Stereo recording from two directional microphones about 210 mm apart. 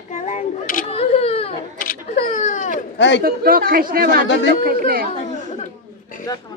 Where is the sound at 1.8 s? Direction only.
40° left (ahead or behind).